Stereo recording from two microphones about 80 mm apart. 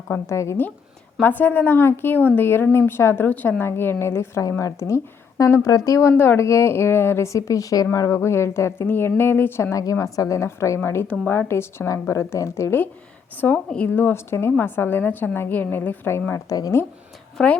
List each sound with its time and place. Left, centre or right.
0.1 s speech: left
1.2 s a woman's voice: left
3.2 s a woman's voice: left
9.8 s speech: left
11.9 s speech: left
13.3 s a woman's voice: left
16.5 s speech: left
17.3 s a woman's voice: centre